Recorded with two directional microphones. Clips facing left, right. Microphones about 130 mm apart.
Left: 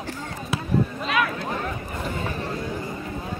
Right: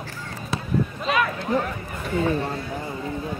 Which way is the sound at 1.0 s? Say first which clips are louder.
Right 1 dB; centre (ahead or behind).